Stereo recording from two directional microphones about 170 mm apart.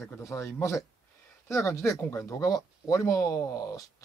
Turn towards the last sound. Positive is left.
turn(degrees=20)  # may be behind; listen again after turning